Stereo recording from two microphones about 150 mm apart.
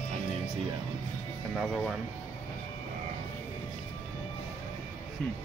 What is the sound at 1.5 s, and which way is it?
Speech, centre (ahead or behind).